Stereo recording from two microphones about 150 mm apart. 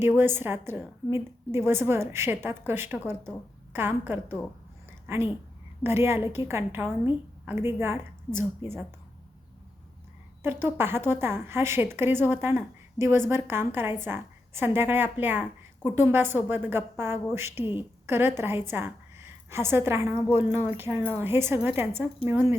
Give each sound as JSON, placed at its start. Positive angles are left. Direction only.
{"t": 0.2, "sound": "a woman's voice", "side_deg": -15}
{"t": 10.4, "sound": "a woman's voice", "side_deg": -15}